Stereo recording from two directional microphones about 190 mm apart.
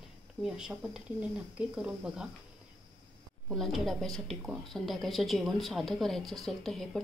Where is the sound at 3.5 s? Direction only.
Centre (ahead or behind).